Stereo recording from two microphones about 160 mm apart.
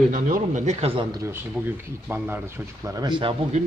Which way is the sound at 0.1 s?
55° right (ahead or behind).